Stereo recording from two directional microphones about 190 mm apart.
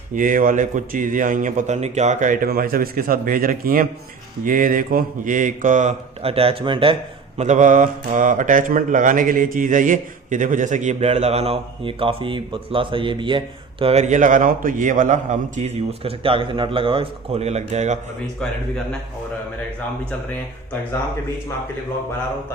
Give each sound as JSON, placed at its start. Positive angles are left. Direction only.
{"t": 0.2, "sound": "a man's voice", "side_deg": -45}
{"t": 7.3, "sound": "speech", "side_deg": -40}